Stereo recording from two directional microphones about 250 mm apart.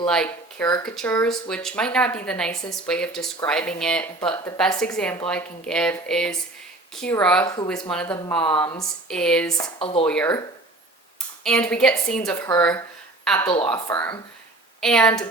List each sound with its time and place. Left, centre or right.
0.1 s a woman's voice: centre
7.4 s speech: centre
7.7 s a woman's voice: centre
9.6 s speech: left
10.1 s a woman's voice: centre
11.4 s a woman's voice: centre
13.7 s speech: centre